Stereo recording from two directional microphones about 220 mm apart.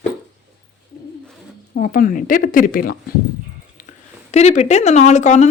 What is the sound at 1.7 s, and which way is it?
Speech, 40° left (ahead or behind).